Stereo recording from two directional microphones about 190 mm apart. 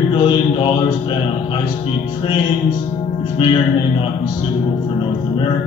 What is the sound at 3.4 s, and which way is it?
Music, 25° left (ahead or behind).